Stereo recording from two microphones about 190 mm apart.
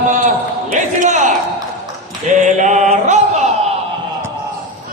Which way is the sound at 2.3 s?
40° right (ahead or behind).